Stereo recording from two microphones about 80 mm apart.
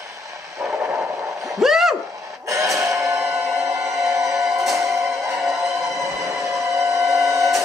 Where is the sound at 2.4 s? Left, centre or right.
Right.